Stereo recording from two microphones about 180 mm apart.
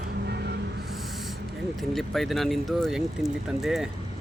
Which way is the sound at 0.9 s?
Centre (ahead or behind).